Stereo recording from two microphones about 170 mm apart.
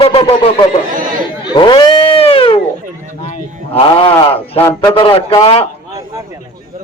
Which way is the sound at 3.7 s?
35° left (ahead or behind).